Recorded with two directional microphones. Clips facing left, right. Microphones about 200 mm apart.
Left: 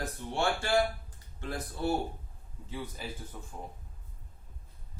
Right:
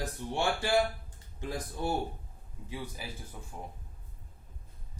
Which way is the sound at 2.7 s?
10° right (ahead or behind).